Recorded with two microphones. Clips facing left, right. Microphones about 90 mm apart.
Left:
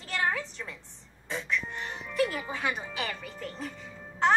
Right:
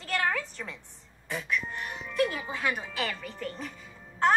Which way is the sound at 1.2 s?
30° left (ahead or behind).